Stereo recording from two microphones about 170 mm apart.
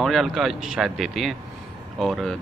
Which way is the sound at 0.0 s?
Centre (ahead or behind).